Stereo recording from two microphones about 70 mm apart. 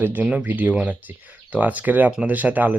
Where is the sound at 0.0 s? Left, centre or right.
Right.